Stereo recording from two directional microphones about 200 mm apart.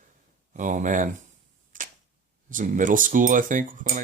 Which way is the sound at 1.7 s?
40° right (ahead or behind).